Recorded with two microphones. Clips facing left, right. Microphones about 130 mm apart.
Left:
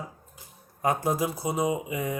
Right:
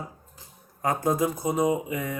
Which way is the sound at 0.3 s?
20° left (ahead or behind).